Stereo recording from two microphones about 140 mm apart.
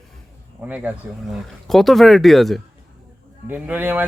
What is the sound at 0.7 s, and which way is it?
Speech, 10° right (ahead or behind).